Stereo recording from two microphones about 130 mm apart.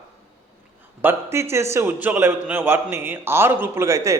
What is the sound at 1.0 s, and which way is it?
A man's voice, 20° right (ahead or behind).